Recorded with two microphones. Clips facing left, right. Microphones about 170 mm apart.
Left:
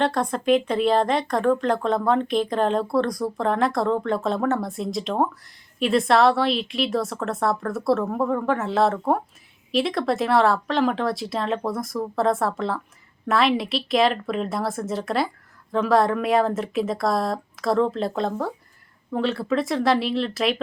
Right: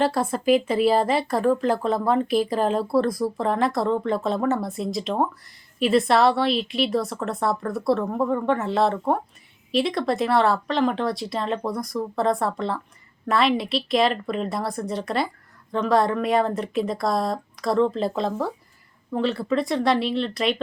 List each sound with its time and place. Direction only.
0.0 s speech: 5° right (ahead or behind)